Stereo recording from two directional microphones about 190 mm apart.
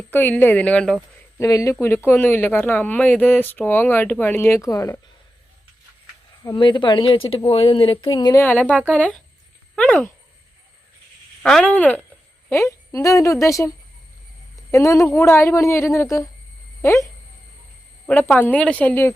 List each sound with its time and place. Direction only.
0.1 s speech: 10° left (ahead or behind)
1.4 s speech: 15° left (ahead or behind)
6.4 s a woman's voice: 20° left (ahead or behind); by 10.1 s 5° left (ahead or behind)
11.4 s speech: 5° left (ahead or behind)